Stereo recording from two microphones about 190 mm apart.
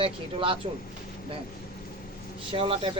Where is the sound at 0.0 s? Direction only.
30° right (ahead or behind).